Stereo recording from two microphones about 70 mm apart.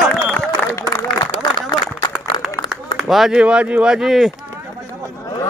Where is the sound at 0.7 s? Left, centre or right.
Left.